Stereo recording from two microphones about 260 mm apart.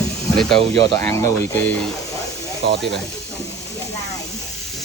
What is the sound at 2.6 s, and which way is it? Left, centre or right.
Speech, right.